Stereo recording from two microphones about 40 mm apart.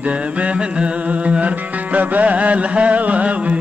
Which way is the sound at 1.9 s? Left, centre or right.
Right.